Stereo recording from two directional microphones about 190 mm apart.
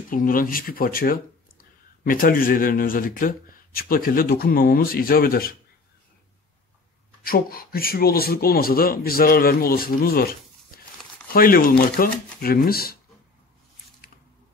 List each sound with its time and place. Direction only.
0.1 s speech: 45° left (ahead or behind)
7.2 s speech: 50° left (ahead or behind)
10.7 s crumpling: 50° left (ahead or behind)
11.3 s speech: 50° left (ahead or behind)